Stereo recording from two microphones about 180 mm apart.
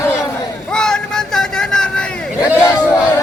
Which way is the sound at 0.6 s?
5° left (ahead or behind).